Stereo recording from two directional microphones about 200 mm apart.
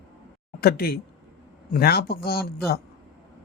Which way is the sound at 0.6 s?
50° left (ahead or behind).